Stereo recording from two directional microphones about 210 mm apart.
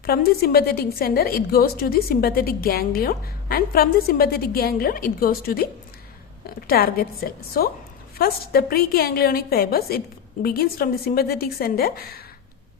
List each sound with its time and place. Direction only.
0.0 s a woman's voice: 45° left (ahead or behind)
6.7 s a woman's voice: 45° left (ahead or behind)